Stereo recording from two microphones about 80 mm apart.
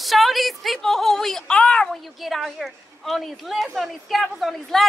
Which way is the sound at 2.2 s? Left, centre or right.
Centre.